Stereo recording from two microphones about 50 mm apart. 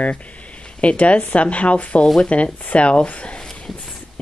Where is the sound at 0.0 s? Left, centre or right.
Left.